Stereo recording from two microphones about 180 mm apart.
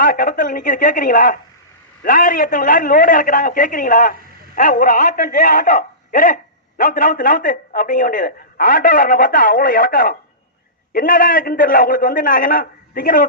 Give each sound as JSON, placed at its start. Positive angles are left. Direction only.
{"t": 0.0, "sound": "a man's voice", "side_deg": 50}